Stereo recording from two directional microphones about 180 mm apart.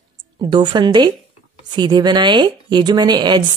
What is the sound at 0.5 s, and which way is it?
Speech, 25° right (ahead or behind).